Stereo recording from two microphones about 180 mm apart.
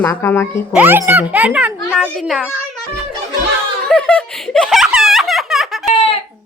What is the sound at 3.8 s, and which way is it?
Giggle, 5° left (ahead or behind).